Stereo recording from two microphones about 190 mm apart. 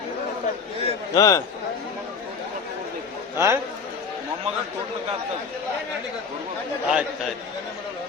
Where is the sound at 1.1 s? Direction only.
20° left (ahead or behind).